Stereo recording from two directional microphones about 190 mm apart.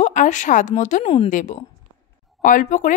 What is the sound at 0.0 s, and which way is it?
Speech, 40° left (ahead or behind).